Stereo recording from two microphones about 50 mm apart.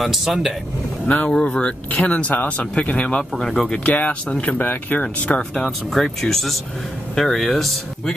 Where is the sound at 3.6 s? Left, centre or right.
Left.